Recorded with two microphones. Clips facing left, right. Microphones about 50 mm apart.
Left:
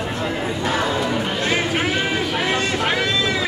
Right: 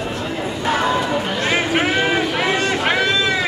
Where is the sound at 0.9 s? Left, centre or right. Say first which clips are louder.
Right 2 dB; centre.